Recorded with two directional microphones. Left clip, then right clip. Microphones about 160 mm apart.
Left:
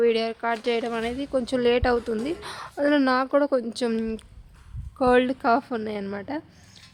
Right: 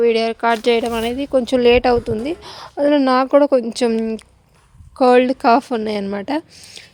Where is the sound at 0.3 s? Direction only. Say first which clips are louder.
Right 10 dB; 65° right (ahead or behind); by 2.1 s 35° right (ahead or behind).